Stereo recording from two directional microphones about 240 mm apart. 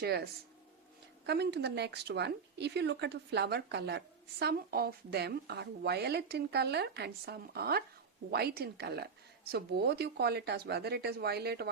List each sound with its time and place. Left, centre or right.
0.0 s speech: right
1.3 s speech: right